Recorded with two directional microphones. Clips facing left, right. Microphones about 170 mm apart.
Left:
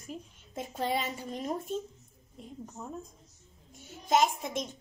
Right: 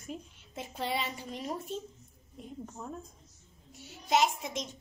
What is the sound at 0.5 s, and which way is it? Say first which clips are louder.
A woman's voice: left 3 dB; 45° left (ahead or behind).